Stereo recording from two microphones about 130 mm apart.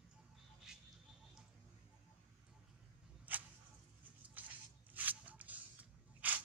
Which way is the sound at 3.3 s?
10° right (ahead or behind).